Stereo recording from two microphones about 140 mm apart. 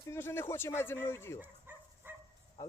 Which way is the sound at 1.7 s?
15° right (ahead or behind).